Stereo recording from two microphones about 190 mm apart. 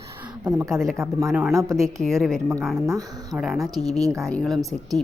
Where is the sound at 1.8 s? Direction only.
Centre (ahead or behind).